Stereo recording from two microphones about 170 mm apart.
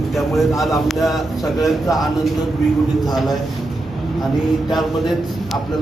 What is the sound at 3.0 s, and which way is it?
Speech, centre (ahead or behind).